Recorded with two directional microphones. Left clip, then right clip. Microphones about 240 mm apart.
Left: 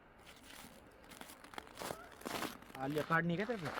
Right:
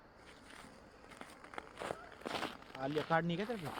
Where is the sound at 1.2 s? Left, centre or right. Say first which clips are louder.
Right 2 dB; left.